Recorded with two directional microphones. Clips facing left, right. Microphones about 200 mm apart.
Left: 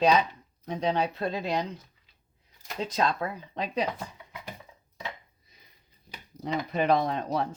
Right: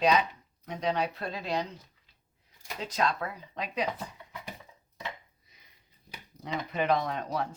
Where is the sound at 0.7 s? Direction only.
30° left (ahead or behind).